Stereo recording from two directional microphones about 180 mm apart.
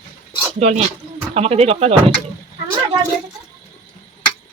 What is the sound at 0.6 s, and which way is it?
Speech, 40° right (ahead or behind).